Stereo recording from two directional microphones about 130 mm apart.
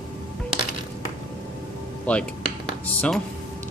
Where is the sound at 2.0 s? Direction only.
10° left (ahead or behind).